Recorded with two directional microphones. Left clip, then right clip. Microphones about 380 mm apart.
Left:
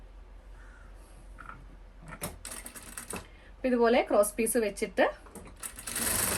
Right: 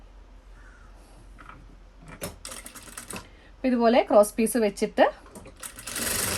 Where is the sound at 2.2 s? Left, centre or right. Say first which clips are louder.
Right 4 dB; centre.